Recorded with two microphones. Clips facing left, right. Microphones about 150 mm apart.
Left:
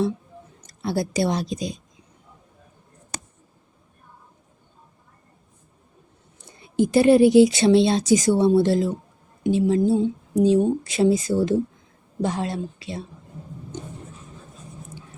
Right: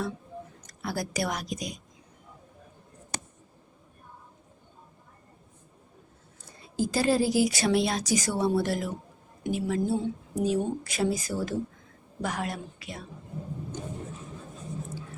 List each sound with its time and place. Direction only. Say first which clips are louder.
0.7 s speech: left 8 dB; 25° left (ahead or behind)
6.6 s speech: left 9 dB; 25° left (ahead or behind)